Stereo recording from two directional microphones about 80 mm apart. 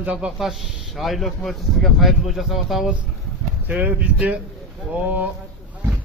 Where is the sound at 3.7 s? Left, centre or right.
Centre.